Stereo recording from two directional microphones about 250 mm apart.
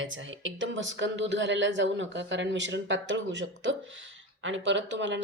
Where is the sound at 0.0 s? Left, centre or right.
Right.